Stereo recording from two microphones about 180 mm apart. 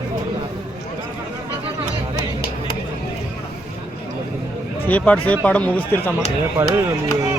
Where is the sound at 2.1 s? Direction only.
60° left (ahead or behind).